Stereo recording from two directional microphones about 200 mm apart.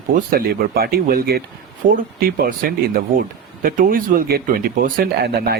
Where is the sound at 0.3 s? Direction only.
50° right (ahead or behind).